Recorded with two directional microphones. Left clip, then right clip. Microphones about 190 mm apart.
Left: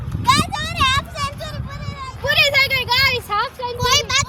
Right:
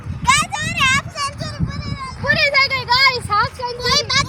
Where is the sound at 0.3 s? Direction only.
20° right (ahead or behind).